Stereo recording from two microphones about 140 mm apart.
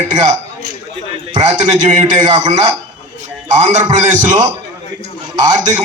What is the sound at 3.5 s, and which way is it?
Speech, 55° right (ahead or behind).